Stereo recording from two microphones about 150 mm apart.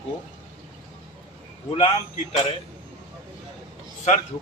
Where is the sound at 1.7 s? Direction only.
45° left (ahead or behind).